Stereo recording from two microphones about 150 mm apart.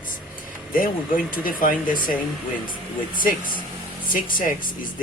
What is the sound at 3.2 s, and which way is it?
Speech, 65° left (ahead or behind).